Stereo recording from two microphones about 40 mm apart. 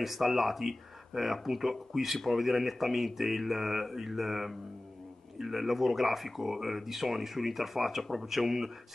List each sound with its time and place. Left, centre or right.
0.0 s speech: centre